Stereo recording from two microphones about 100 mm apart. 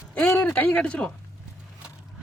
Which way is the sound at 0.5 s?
15° left (ahead or behind).